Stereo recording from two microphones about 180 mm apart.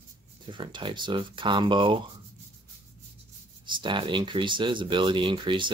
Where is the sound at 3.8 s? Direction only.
25° right (ahead or behind).